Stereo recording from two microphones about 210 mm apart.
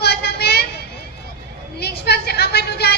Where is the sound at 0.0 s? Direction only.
50° left (ahead or behind).